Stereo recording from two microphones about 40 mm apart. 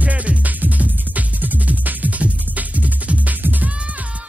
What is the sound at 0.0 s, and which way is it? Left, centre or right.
Music, right.